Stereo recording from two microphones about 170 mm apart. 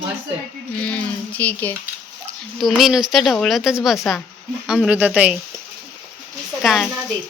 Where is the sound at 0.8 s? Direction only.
10° left (ahead or behind); by 5.4 s 10° right (ahead or behind).